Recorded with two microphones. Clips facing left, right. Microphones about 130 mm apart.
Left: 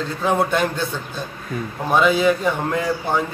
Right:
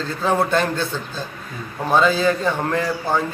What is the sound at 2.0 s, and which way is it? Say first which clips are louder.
Speech: left 1 dB; 10° left (ahead or behind).